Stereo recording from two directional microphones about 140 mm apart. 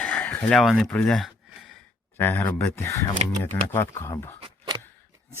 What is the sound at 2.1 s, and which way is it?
Speech, 15° left (ahead or behind).